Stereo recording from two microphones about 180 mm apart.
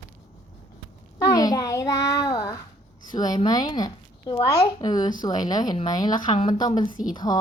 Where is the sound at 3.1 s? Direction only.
20° left (ahead or behind).